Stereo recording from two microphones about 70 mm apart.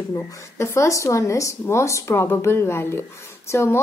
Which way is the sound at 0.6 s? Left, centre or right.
Left.